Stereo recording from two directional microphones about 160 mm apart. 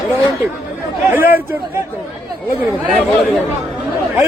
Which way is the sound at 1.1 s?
10° right (ahead or behind).